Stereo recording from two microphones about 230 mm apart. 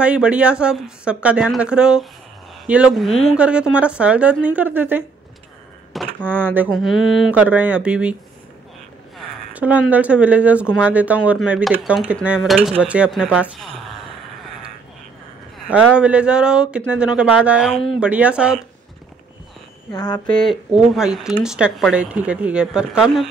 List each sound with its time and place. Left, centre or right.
0.0 s speech: centre
5.9 s speech: centre
6.4 s speech: centre
9.5 s speech: centre
15.7 s speech: centre
19.9 s speech: centre
20.3 s speech: centre